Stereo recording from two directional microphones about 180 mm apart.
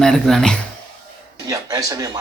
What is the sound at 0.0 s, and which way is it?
Scratching, 5° left (ahead or behind).